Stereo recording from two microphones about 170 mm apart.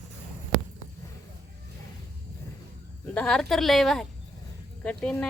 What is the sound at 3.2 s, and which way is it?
A woman's voice, 5° left (ahead or behind).